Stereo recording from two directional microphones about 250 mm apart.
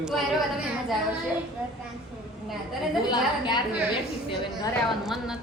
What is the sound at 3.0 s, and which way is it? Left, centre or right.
Speech, centre.